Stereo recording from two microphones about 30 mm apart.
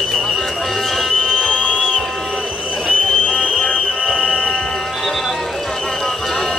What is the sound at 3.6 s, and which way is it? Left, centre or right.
Music, left.